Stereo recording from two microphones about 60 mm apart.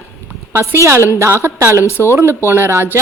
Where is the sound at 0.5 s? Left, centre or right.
Right.